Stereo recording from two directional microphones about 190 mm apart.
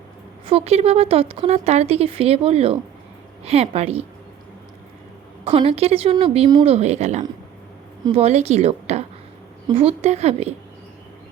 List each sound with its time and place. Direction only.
0.4 s speech: 30° right (ahead or behind)
5.5 s speech: 30° right (ahead or behind)